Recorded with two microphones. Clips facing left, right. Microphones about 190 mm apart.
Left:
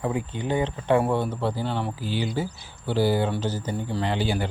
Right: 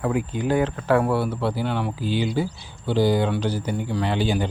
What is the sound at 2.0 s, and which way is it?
Speech, 15° right (ahead or behind).